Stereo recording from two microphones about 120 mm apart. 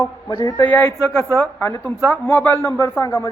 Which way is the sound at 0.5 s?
15° left (ahead or behind).